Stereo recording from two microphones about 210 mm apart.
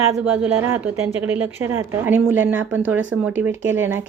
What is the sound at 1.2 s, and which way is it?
A woman's voice, 10° right (ahead or behind).